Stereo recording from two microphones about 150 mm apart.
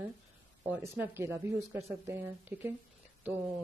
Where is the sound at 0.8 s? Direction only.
15° right (ahead or behind).